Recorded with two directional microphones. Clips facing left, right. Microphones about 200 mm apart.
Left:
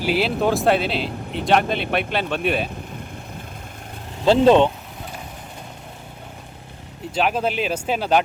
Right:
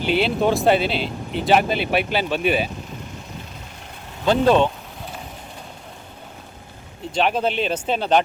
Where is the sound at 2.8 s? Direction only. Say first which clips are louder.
Left 1 dB; 55° left (ahead or behind).